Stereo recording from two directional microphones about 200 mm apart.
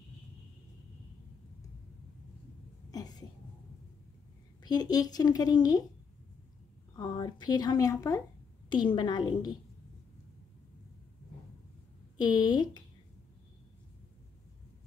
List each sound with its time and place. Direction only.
2.9 s a sound: 20° left (ahead or behind)
4.6 s a woman's voice: 20° left (ahead or behind)
7.0 s a woman's voice: 20° left (ahead or behind)
12.2 s a woman's voice: 20° left (ahead or behind)